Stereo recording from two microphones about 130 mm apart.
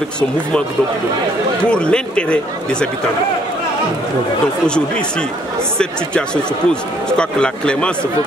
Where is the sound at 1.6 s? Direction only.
5° left (ahead or behind).